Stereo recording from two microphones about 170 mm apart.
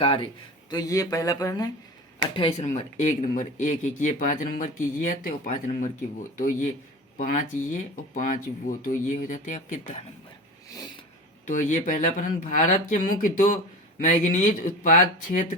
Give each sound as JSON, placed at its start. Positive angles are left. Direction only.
{"t": 0.0, "sound": "a man's voice", "side_deg": 30}
{"t": 0.7, "sound": "speech", "side_deg": 20}
{"t": 2.6, "sound": "speech", "side_deg": 45}
{"t": 7.2, "sound": "speech", "side_deg": 50}
{"t": 10.7, "sound": "a sound", "side_deg": 20}
{"t": 11.4, "sound": "speech", "side_deg": 50}